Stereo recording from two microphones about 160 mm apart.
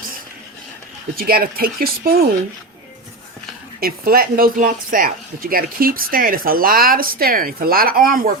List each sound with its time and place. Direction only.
1.1 s speech: 70° right (ahead or behind)
3.8 s speech: 70° right (ahead or behind)